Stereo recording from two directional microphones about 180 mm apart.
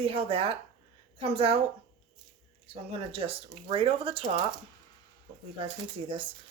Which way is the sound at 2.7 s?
30° right (ahead or behind).